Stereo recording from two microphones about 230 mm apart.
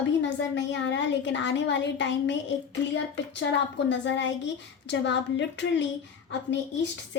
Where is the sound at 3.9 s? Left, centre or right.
Left.